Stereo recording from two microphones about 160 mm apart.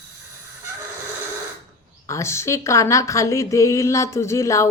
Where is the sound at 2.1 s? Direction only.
15° left (ahead or behind).